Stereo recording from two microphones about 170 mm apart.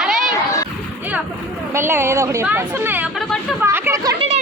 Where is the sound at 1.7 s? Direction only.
15° right (ahead or behind).